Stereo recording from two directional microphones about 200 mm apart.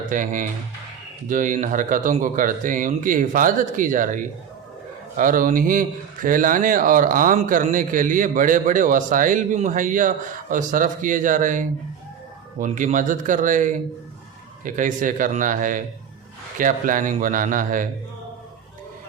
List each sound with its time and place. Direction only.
0.1 s speech: 40° right (ahead or behind)